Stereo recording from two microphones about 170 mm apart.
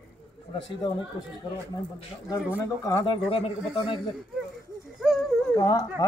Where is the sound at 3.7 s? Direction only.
30° left (ahead or behind).